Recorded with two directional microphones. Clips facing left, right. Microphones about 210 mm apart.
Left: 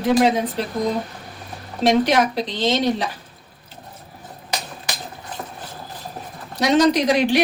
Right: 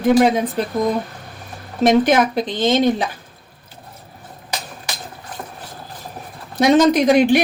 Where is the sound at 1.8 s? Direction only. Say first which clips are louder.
Right 3 dB; 50° right (ahead or behind).